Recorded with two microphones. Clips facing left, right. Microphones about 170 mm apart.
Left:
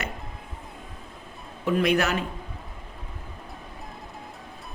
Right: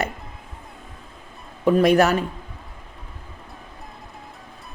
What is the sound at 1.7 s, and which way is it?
Speech, 40° right (ahead or behind).